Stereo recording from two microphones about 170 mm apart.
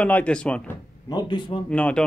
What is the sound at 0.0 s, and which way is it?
Speech, 10° left (ahead or behind).